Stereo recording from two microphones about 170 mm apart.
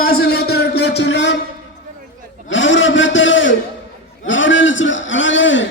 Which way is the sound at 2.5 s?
90° left.